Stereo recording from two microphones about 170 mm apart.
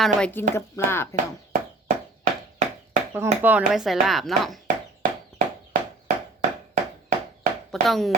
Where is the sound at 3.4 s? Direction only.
5° right (ahead or behind).